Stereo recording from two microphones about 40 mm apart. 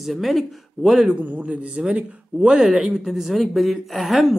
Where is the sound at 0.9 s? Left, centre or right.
Centre.